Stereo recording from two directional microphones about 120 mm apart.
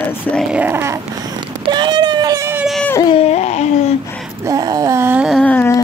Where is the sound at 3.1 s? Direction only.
60° left (ahead or behind).